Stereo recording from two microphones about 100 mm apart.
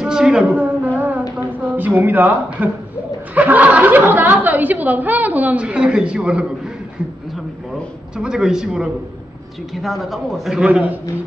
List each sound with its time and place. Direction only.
0.0 s a sound: 5° right (ahead or behind)
1.3 s speech: 15° right (ahead or behind)
8.2 s a man's voice: 5° right (ahead or behind)